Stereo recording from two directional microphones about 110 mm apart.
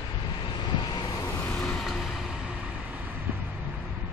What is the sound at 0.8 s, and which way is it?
Vehicle, 40° left (ahead or behind).